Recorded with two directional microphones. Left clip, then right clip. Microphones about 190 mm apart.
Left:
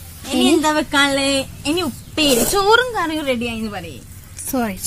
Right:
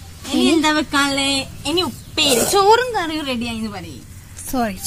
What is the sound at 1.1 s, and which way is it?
A woman's voice, 15° left (ahead or behind).